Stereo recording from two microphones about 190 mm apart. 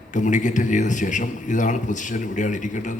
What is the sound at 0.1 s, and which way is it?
A man's voice, 40° left (ahead or behind).